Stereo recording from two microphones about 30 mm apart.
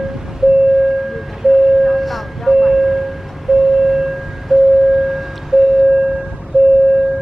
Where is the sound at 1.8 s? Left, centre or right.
Centre.